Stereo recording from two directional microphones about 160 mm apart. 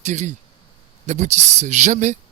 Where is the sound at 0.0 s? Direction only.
45° right (ahead or behind).